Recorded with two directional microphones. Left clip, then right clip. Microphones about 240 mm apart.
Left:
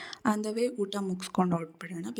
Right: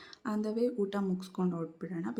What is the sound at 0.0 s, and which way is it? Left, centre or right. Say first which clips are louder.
Speech: left 6 dB; left.